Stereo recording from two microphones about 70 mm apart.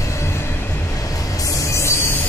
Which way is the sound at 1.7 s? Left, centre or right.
Left.